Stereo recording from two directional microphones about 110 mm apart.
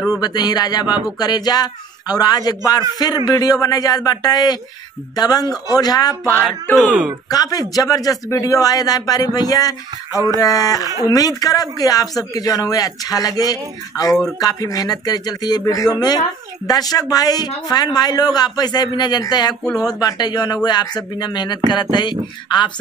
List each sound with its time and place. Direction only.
0.1 s speech: 35° left (ahead or behind)
6.8 s speech: 10° right (ahead or behind)
7.2 s speech: 35° left (ahead or behind)
10.1 s a sound: 30° right (ahead or behind)
10.4 s speech: 35° left (ahead or behind)